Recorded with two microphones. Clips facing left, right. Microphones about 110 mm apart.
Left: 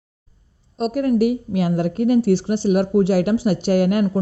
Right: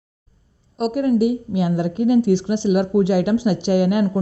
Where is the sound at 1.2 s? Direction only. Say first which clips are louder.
Even; 50° left (ahead or behind).